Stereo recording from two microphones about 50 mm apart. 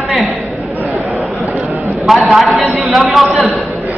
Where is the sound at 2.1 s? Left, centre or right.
Centre.